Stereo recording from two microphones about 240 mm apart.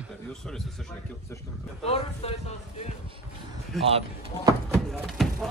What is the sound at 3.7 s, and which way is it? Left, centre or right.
Speech, centre.